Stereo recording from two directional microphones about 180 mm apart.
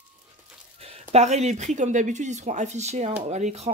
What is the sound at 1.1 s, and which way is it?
Speech, 40° right (ahead or behind).